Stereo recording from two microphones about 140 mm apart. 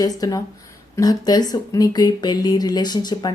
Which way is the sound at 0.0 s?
25° left (ahead or behind).